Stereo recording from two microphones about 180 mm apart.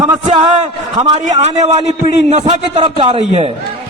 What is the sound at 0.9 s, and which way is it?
A man's voice, 35° right (ahead or behind).